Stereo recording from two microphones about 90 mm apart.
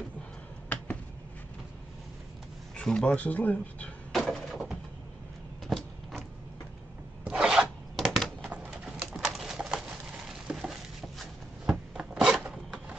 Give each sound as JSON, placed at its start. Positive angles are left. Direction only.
{"t": 2.7, "sound": "speech", "side_deg": 5}
{"t": 4.1, "sound": "door", "side_deg": 0}
{"t": 5.7, "sound": "vehicle", "side_deg": 5}
{"t": 7.2, "sound": "filing", "side_deg": -10}
{"t": 7.9, "sound": "typewriter", "side_deg": 0}
{"t": 8.6, "sound": "pigeon", "side_deg": -5}
{"t": 11.7, "sound": "filing", "side_deg": -10}